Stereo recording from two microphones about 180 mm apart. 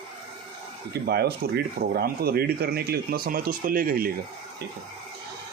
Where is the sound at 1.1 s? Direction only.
60° right (ahead or behind).